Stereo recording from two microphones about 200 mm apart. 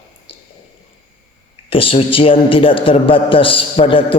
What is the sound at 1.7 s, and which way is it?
A man's voice, 25° left (ahead or behind).